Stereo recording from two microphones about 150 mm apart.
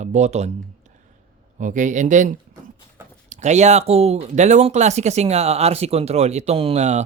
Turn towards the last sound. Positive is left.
turn(degrees=-50)  # may be behind; listen again after turning